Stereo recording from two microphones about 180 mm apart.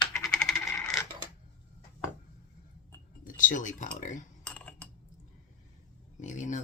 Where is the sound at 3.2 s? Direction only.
45° left (ahead or behind).